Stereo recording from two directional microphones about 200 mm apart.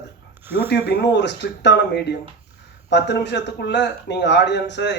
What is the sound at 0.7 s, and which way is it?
Speech, 55° left (ahead or behind).